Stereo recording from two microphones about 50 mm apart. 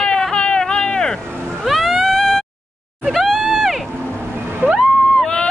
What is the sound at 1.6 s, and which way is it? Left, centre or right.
Cat, centre.